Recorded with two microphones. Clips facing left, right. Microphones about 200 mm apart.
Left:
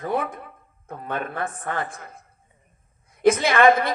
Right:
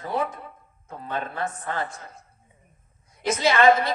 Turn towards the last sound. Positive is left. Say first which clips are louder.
# left 1 dB
turn(degrees=55)  # may be behind; listen again after turning